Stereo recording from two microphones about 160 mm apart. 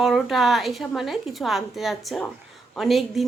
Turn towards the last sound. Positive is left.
turn(degrees=0)  # may be behind; listen again after turning